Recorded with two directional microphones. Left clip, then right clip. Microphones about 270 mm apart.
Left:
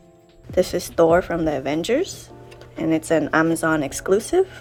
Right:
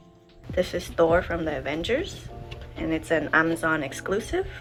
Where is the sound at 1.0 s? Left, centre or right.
Left.